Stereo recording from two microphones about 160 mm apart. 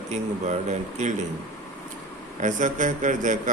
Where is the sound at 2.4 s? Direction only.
55° right (ahead or behind).